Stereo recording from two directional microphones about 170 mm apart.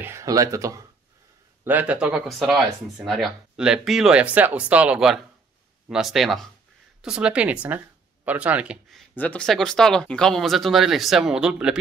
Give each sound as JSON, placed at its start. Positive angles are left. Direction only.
{"t": 0.0, "sound": "speech", "side_deg": -15}
{"t": 9.1, "sound": "speech", "side_deg": 10}